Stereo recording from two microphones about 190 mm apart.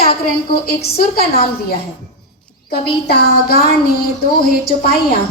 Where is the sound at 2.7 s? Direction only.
55° left (ahead or behind).